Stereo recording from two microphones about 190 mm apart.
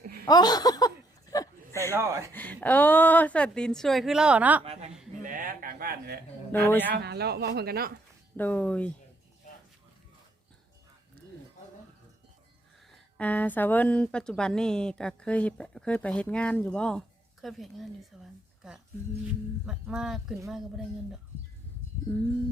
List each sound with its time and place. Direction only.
0.0 s a sound: 55° right (ahead or behind)
0.3 s a sound: 20° left (ahead or behind)
1.9 s speech: 15° right (ahead or behind)
2.3 s a woman's voice: 10° left (ahead or behind); by 4.6 s 10° right (ahead or behind)
4.6 s a woman's voice: 30° right (ahead or behind)
5.2 s a sound: 45° right (ahead or behind)
6.7 s speech: 10° left (ahead or behind)
6.9 s speech: 60° right (ahead or behind)
8.4 s speech: 10° left (ahead or behind)
12.9 s a woman's voice: 5° left (ahead or behind)
19.6 s a woman's voice: 5° right (ahead or behind)